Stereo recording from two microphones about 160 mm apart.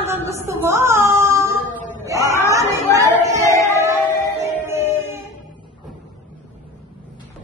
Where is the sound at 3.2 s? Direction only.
20° right (ahead or behind).